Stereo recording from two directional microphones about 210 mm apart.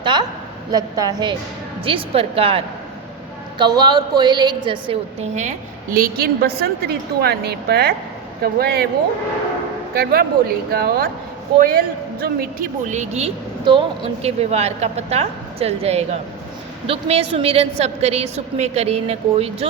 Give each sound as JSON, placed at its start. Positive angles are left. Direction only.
{"t": 0.0, "sound": "a woman's voice", "side_deg": -20}
{"t": 6.0, "sound": "a woman's voice", "side_deg": -45}
{"t": 9.9, "sound": "a woman's voice", "side_deg": -50}